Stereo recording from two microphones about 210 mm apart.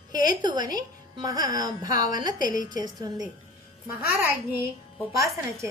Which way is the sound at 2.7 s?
20° right (ahead or behind).